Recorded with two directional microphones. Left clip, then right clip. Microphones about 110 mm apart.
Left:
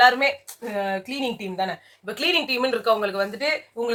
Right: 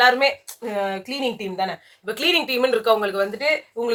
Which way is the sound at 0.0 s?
20° right (ahead or behind).